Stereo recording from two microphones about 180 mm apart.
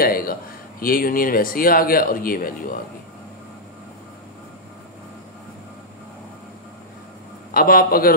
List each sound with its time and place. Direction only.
0.0 s speech: 55° left (ahead or behind)
7.5 s a man's voice: 55° left (ahead or behind)